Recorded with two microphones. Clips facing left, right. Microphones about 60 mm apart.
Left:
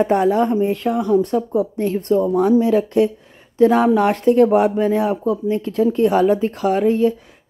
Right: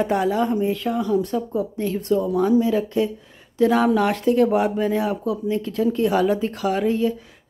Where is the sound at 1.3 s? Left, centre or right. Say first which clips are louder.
Left 5 dB; left.